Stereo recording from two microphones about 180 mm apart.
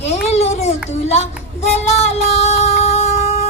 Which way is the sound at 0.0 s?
35° left (ahead or behind).